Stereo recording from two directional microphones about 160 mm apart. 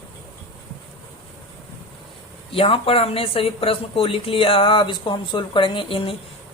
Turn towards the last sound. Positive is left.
turn(degrees=30)  # may be behind; listen again after turning